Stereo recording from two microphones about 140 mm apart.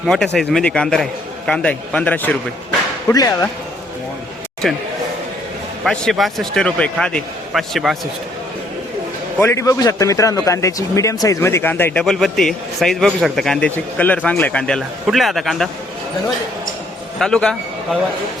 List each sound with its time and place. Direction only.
0.1 s a man's voice: centre (ahead or behind)
3.1 s a man's voice: 25° left (ahead or behind)
5.8 s a man's voice: centre (ahead or behind)
9.4 s a man's voice: 20° left (ahead or behind)
12.0 s a man's voice: centre (ahead or behind)
17.2 s a man's voice: 5° left (ahead or behind)